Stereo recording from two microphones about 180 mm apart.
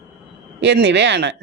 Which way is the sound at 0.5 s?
75° right (ahead or behind).